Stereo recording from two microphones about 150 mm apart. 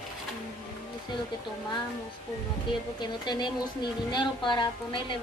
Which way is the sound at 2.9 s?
30° left (ahead or behind).